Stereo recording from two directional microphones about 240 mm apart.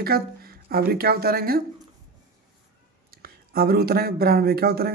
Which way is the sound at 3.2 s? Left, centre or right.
Right.